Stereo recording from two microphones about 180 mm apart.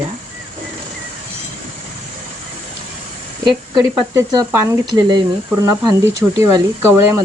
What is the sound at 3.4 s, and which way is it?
Speech, 20° right (ahead or behind).